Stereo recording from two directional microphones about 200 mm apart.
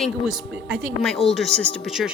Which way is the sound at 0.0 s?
Centre (ahead or behind).